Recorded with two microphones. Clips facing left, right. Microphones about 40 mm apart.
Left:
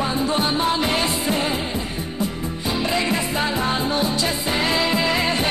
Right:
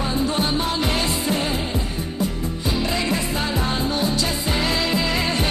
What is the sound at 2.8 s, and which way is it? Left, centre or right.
Music, centre.